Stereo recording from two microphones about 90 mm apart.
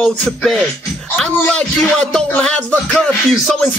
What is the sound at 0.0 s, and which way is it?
Music, 5° left (ahead or behind).